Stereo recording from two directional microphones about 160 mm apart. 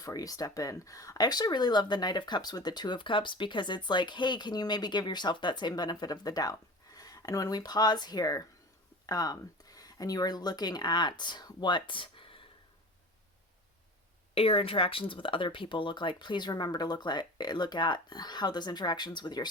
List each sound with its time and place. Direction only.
0.0 s speech: 20° left (ahead or behind)
14.3 s speech: 35° left (ahead or behind)